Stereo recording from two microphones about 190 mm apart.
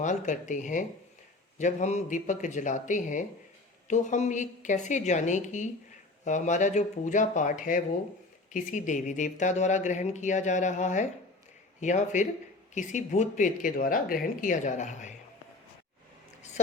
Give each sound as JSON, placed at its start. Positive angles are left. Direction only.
{"t": 0.0, "sound": "speech", "side_deg": 40}